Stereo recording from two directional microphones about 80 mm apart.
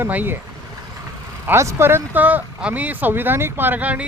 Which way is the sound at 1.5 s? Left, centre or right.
Right.